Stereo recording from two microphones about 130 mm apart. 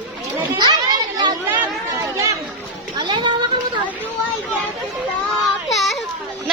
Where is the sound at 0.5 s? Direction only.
35° right (ahead or behind).